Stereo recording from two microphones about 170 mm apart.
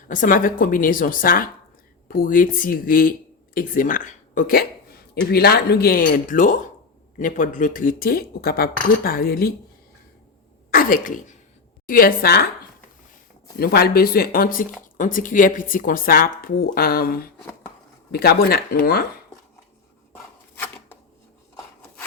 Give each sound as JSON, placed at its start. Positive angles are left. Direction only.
{"t": 0.1, "sound": "a woman's voice", "side_deg": 50}
{"t": 10.7, "sound": "a woman's voice", "side_deg": 55}
{"t": 13.6, "sound": "a woman's voice", "side_deg": 65}